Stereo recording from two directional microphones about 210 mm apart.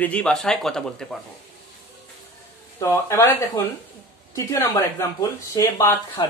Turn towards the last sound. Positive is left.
turn(degrees=15)  # may be behind; listen again after turning